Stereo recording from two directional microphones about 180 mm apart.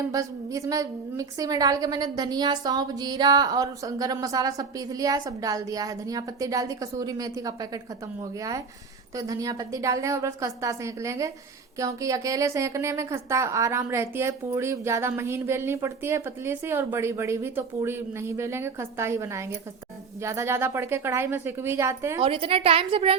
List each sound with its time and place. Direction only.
0.1 s a woman's voice: 20° right (ahead or behind)
22.2 s a woman's voice: 30° right (ahead or behind)